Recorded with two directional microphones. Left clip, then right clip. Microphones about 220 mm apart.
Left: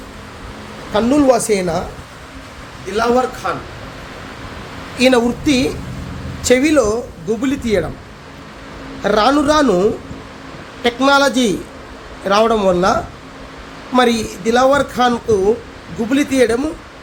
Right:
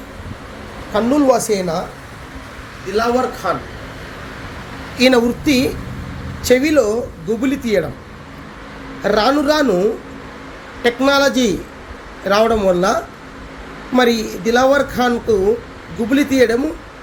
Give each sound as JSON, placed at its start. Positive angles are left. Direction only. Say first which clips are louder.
{"t": 0.9, "sound": "speech", "louder": "left 1 dB", "side_deg": 15}
{"t": 2.9, "sound": "speech", "louder": "left 1 dB", "side_deg": 10}
{"t": 4.9, "sound": "speech", "louder": "even", "side_deg": 5}
{"t": 9.0, "sound": "speech", "louder": "left 1 dB", "side_deg": 10}
{"t": 10.8, "sound": "speech", "louder": "left 1 dB", "side_deg": 10}